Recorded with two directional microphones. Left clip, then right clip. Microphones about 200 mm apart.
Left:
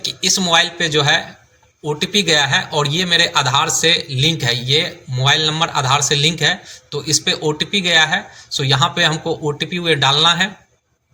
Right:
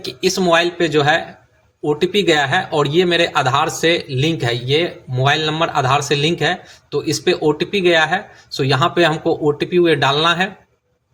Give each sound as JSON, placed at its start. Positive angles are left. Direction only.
{"t": 0.0, "sound": "a man's voice", "side_deg": -45}